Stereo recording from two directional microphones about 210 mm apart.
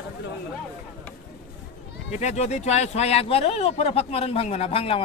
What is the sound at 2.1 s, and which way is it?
Speech, 35° left (ahead or behind).